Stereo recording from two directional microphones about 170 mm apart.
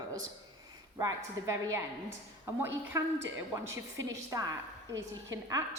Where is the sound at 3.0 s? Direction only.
15° right (ahead or behind).